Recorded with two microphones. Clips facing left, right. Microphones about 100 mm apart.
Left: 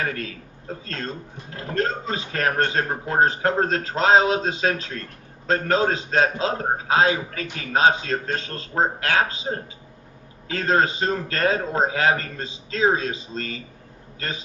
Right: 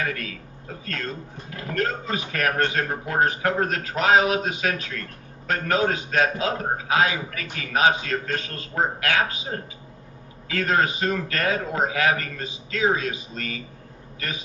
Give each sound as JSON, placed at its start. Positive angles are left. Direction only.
{"t": 0.0, "sound": "a man's voice", "side_deg": 30}
{"t": 10.5, "sound": "a man's voice", "side_deg": 30}
{"t": 14.2, "sound": "a sound", "side_deg": 30}